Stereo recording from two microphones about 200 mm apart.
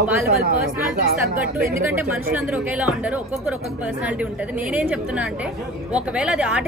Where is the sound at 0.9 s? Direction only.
45° right (ahead or behind).